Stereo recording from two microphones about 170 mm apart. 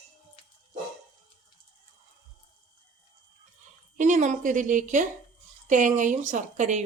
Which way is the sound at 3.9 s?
45° right (ahead or behind).